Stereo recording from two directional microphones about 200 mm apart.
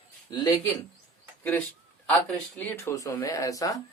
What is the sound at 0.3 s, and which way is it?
Speech, 20° left (ahead or behind).